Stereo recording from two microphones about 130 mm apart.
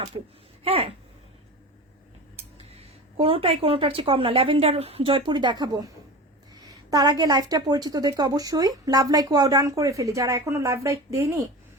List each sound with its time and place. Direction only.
0.6 s a woman's voice: 50° right (ahead or behind)
3.2 s a woman's voice: 45° right (ahead or behind); by 11.4 s 25° right (ahead or behind)